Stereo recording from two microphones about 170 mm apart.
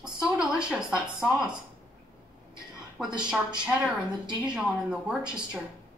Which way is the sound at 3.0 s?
5° right (ahead or behind).